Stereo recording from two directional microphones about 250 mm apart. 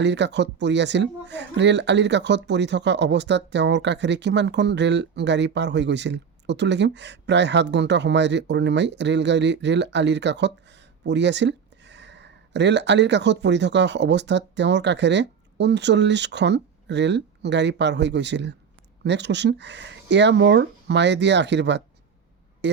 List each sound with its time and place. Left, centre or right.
0.0 s speech: right